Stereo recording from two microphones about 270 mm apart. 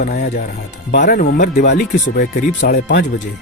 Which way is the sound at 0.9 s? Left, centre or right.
Left.